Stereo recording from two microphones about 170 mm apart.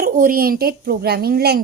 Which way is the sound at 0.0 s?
55° right (ahead or behind).